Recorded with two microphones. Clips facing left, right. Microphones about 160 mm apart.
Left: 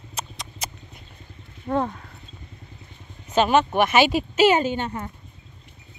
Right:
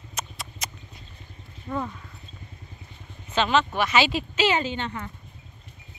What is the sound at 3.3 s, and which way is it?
Speech, 45° left (ahead or behind).